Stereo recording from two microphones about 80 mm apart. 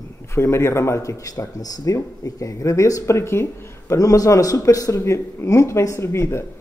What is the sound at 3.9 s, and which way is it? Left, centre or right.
Speech, left.